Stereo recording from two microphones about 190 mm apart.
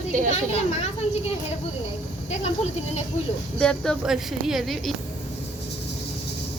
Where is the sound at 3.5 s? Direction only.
5° left (ahead or behind).